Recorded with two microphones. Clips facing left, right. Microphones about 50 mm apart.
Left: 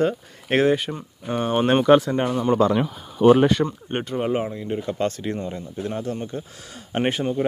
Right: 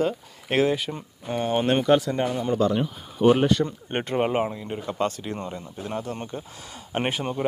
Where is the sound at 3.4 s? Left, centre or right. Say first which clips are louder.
Left 2 dB; left.